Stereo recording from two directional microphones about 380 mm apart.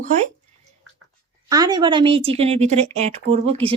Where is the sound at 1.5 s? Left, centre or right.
Centre.